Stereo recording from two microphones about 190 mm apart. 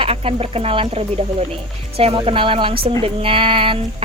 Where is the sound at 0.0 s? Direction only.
30° right (ahead or behind).